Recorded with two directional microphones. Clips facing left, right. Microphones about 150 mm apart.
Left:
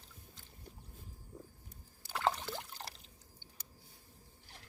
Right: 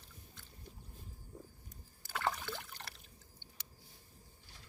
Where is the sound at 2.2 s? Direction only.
35° left (ahead or behind).